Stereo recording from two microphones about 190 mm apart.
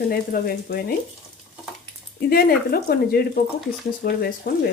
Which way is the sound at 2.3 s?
55° left (ahead or behind).